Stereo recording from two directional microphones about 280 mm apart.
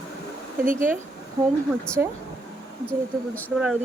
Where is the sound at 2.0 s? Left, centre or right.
Centre.